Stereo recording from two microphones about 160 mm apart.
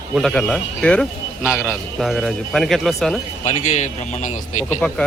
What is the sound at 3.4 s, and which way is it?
Speech, 50° left (ahead or behind).